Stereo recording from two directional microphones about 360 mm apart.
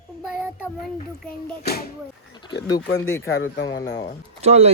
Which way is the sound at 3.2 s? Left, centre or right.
Left.